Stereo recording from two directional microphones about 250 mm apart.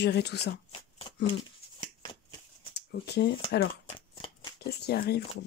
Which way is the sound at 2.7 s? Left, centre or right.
Left.